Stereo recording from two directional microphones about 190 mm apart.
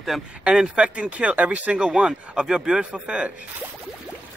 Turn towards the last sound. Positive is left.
turn(degrees=-5)  # may be behind; listen again after turning